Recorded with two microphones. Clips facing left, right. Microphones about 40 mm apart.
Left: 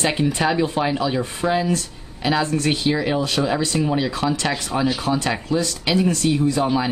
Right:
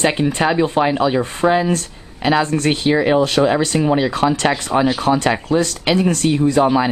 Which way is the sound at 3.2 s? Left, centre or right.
Right.